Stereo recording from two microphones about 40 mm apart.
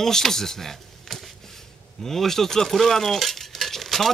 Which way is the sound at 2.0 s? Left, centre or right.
Centre.